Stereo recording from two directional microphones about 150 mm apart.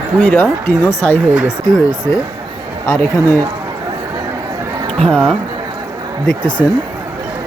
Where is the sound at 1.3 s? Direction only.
5° right (ahead or behind).